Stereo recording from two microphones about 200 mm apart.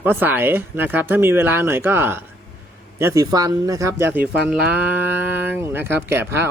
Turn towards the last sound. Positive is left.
turn(degrees=-10)  # may be behind; listen again after turning